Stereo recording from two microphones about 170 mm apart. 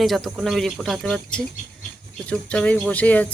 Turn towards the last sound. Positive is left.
turn(degrees=10)  # may be behind; listen again after turning